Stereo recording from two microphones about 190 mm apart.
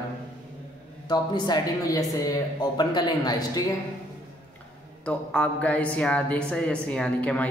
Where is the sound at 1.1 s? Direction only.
20° left (ahead or behind).